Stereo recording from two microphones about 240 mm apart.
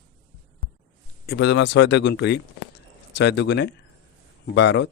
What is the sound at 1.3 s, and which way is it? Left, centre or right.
Speech, left.